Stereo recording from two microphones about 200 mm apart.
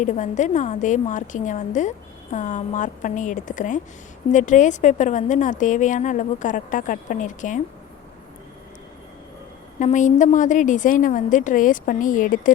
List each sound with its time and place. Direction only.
0.0 s a woman's voice: 40° left (ahead or behind)
9.7 s a woman's voice: 40° left (ahead or behind)